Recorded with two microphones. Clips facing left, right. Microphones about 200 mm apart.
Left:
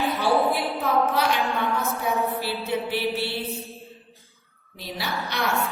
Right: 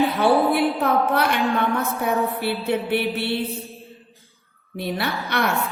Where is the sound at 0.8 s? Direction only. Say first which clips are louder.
Right 3 dB; 60° right (ahead or behind).